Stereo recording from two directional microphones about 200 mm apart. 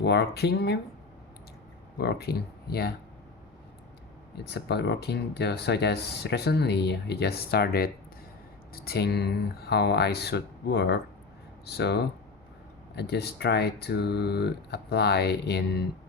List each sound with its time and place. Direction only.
0.0 s speech: 55° left (ahead or behind)
2.0 s speech: 50° left (ahead or behind)
4.4 s speech: 55° left (ahead or behind)